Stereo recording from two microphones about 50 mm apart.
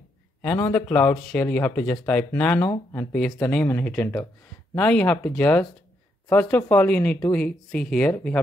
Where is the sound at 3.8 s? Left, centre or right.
Left.